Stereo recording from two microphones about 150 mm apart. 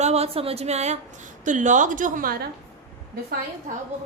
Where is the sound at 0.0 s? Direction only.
45° right (ahead or behind); by 2.5 s 80° right.